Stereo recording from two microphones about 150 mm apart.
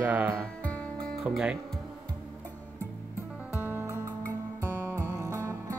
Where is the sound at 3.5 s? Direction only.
15° right (ahead or behind).